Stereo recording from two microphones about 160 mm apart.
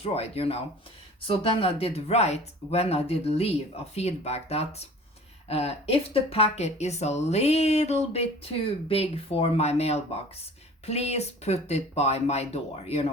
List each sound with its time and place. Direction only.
0.0 s speech: 40° left (ahead or behind)